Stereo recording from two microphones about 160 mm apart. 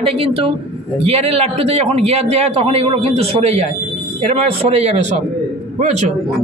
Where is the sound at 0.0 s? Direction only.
35° right (ahead or behind).